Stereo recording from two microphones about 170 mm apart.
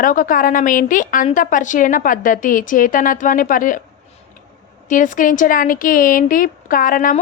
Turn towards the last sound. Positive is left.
turn(degrees=55)  # may be behind; listen again after turning